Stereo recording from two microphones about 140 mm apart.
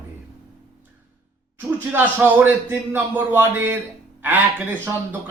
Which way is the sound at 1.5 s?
15° right (ahead or behind).